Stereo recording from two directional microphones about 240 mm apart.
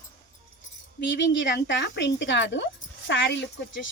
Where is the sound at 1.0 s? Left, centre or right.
Left.